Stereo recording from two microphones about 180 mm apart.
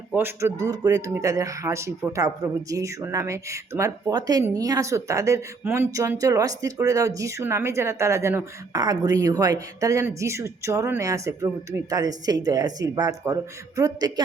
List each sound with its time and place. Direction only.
0.1 s speech: 10° right (ahead or behind)